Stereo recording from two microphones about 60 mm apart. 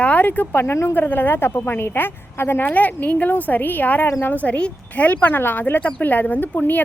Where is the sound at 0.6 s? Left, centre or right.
Left.